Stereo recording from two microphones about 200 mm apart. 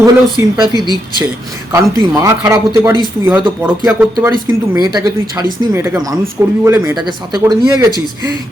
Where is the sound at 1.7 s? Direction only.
15° right (ahead or behind).